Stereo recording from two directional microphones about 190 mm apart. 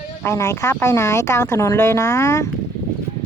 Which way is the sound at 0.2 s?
15° left (ahead or behind).